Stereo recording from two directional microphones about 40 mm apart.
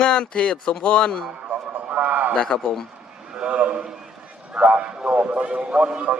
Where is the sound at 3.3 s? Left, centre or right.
Right.